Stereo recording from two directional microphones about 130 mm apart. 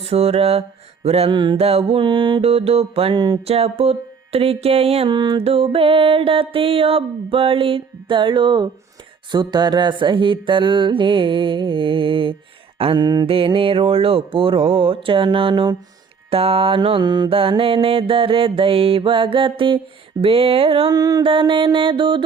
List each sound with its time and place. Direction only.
0.0 s mantra: 50° right (ahead or behind)
1.5 s mantra: 50° right (ahead or behind)
3.4 s mantra: 50° right (ahead or behind)
20.9 s music: 30° right (ahead or behind)
21.2 s mantra: 40° right (ahead or behind)